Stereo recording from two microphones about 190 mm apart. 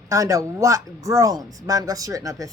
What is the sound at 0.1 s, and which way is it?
Speech, 15° right (ahead or behind).